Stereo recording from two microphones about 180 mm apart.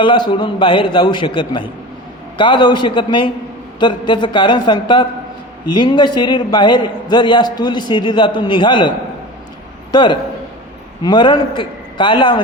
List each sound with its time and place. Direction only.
0.0 s a man's voice: 25° left (ahead or behind)
9.9 s a man's voice: 25° left (ahead or behind)